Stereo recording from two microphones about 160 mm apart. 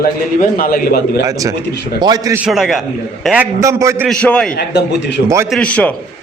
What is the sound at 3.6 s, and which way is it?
Speech, 20° right (ahead or behind).